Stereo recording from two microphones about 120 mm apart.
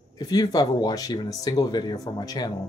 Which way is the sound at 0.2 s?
35° left (ahead or behind).